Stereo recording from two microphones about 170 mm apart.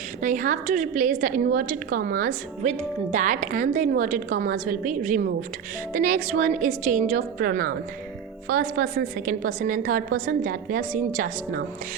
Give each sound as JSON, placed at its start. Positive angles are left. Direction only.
{"t": 0.2, "sound": "a woman's voice", "side_deg": -50}